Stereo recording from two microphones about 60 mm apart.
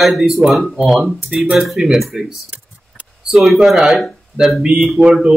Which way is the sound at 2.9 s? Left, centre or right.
Centre.